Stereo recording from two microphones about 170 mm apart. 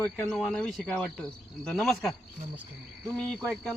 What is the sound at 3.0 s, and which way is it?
Speech, 5° left (ahead or behind).